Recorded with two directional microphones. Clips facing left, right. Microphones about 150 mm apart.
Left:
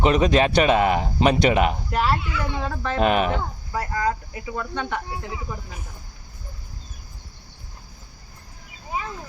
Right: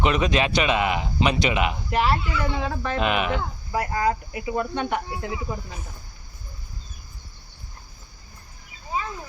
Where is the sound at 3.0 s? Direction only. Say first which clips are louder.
Left 4 dB; 40° left (ahead or behind).